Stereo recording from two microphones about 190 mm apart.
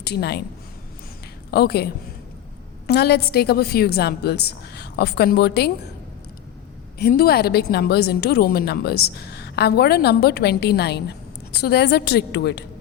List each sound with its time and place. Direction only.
0.0 s a woman's voice: 60° left (ahead or behind)
1.5 s a woman's voice: 60° left (ahead or behind)
7.0 s a woman's voice: 55° left (ahead or behind)